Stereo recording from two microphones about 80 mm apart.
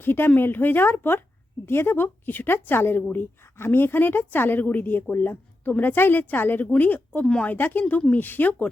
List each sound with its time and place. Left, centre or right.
0.0 s a woman's voice: left; by 7.5 s centre
7.5 s a woman's voice: left